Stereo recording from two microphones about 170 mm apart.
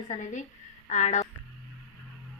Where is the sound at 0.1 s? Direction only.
45° left (ahead or behind).